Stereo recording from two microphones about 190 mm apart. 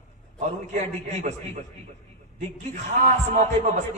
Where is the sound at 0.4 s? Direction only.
35° right (ahead or behind).